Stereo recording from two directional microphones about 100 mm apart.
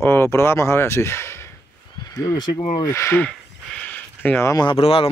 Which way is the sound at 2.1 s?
40° left (ahead or behind).